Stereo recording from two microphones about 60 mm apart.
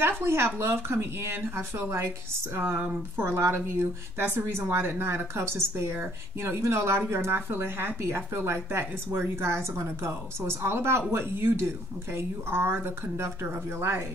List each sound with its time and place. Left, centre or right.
0.2 s speech: right